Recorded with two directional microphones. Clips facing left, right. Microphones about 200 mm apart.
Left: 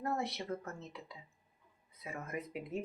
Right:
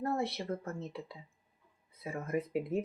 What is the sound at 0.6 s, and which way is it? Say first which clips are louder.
Speech: right 6 dB; 30° right (ahead or behind).